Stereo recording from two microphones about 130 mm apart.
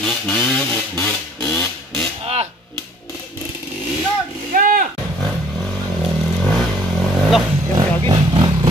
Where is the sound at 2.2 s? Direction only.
50° right (ahead or behind).